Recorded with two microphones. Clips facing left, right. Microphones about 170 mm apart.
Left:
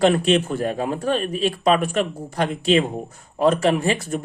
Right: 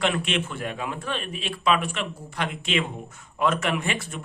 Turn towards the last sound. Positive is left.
turn(degrees=40)  # may be behind; listen again after turning